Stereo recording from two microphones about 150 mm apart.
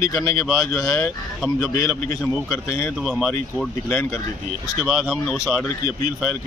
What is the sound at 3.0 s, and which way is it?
Speech, centre (ahead or behind).